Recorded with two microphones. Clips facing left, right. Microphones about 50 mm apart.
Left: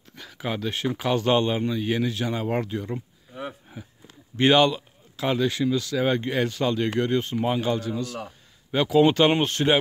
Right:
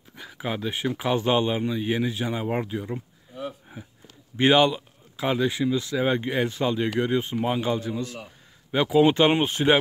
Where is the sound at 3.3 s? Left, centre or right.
Left.